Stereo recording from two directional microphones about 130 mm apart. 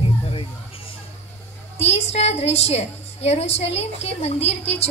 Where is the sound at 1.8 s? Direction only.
55° left (ahead or behind).